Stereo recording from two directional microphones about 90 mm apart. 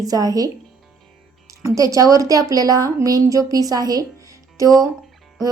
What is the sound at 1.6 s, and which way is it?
A woman's voice, 35° right (ahead or behind).